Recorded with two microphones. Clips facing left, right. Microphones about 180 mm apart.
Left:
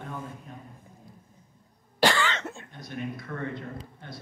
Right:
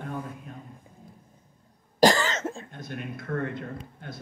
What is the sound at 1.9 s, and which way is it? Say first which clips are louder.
Cough: right 4 dB; 40° right (ahead or behind).